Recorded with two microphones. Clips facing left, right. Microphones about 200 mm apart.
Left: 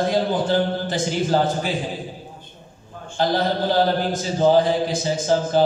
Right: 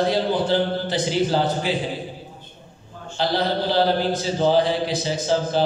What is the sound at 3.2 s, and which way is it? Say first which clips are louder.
Mantra: left 2 dB; 45° left (ahead or behind).